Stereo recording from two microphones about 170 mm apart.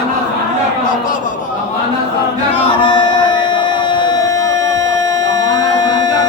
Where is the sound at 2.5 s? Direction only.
30° left (ahead or behind).